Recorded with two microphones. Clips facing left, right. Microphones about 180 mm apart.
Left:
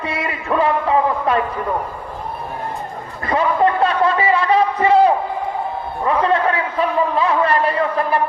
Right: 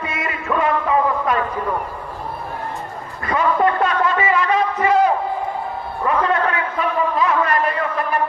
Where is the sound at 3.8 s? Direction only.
35° left (ahead or behind).